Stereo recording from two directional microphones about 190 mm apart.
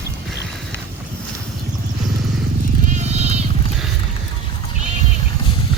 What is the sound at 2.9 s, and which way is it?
Sheep, 35° right (ahead or behind).